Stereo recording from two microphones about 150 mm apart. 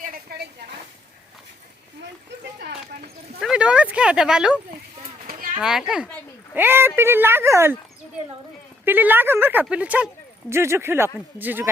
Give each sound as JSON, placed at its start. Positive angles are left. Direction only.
{"t": 0.0, "sound": "a sound", "side_deg": -80}
{"t": 3.4, "sound": "a child's voice", "side_deg": -5}
{"t": 8.8, "sound": "speech", "side_deg": -15}